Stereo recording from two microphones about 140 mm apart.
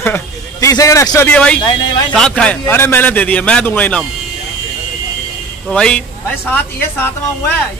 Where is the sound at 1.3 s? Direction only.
10° left (ahead or behind).